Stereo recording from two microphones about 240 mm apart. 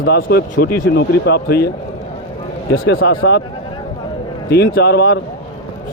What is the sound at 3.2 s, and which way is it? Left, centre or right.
Speech, left.